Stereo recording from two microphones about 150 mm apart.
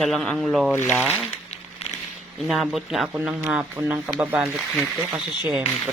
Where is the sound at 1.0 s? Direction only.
10° right (ahead or behind).